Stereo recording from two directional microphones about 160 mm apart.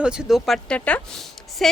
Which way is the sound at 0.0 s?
5° right (ahead or behind).